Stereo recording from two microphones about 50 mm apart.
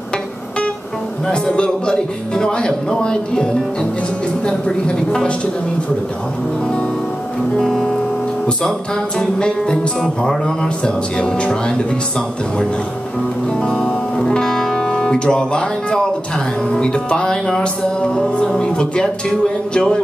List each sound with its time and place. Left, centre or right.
1.2 s speech: centre
4.5 s speech: centre
7.6 s speech: centre
9.2 s music: centre
13.6 s speech: centre